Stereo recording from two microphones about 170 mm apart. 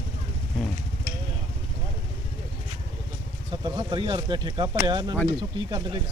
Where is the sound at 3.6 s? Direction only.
25° right (ahead or behind).